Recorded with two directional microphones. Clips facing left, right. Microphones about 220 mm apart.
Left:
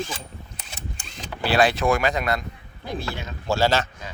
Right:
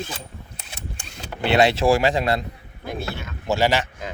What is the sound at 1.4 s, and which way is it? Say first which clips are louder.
Speech: right 2 dB; 25° right (ahead or behind).